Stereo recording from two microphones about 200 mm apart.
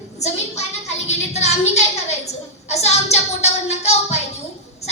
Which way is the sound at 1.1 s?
35° left (ahead or behind).